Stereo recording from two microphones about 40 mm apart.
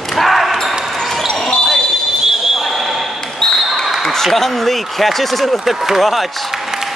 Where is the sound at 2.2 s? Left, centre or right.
Centre.